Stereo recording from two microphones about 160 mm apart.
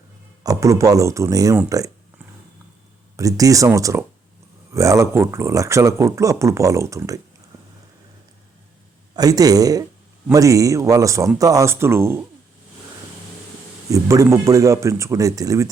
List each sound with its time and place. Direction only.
0.4 s speech: 20° right (ahead or behind)
3.2 s speech: 20° right (ahead or behind)
9.1 s speech: 25° right (ahead or behind)
13.9 s speech: 20° right (ahead or behind)